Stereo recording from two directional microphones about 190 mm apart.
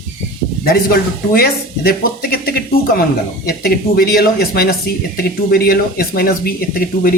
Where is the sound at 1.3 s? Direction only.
50° left (ahead or behind).